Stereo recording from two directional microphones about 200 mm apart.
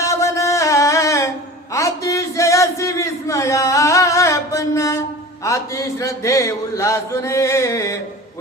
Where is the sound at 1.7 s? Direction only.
15° left (ahead or behind).